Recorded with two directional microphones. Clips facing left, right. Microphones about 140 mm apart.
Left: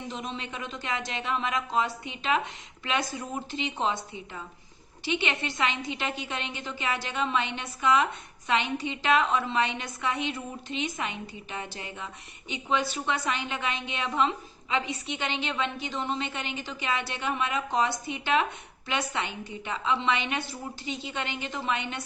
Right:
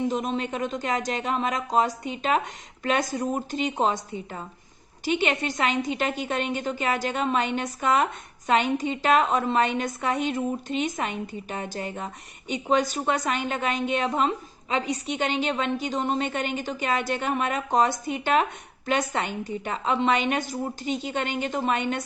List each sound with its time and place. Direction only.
0.1 s a woman's voice: 45° right (ahead or behind)